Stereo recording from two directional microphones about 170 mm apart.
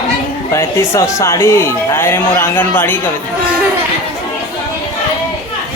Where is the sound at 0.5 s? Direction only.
15° left (ahead or behind).